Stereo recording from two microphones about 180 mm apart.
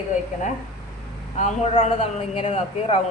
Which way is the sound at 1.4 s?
35° left (ahead or behind).